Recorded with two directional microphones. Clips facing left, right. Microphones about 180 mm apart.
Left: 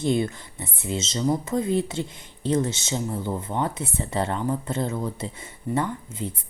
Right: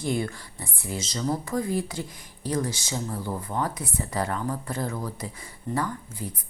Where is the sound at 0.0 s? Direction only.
25° left (ahead or behind).